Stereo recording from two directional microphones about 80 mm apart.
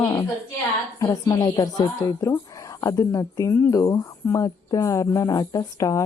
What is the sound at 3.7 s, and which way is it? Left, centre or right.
A woman's voice, left.